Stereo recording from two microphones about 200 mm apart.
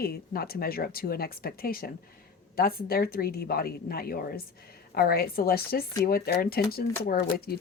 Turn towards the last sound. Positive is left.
turn(degrees=50)  # may be behind; listen again after turning